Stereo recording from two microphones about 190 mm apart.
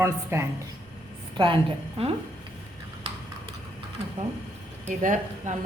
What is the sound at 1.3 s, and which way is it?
Speech, 25° right (ahead or behind).